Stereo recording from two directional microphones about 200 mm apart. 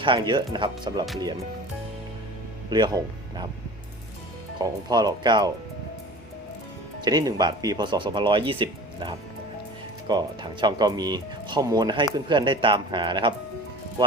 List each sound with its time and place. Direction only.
0.0 s speech: 25° right (ahead or behind)
2.6 s speech: 20° right (ahead or behind)
4.5 s speech: 20° right (ahead or behind)
7.0 s speech: 20° right (ahead or behind)